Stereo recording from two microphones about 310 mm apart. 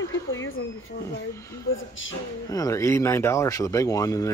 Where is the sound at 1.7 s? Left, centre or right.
Left.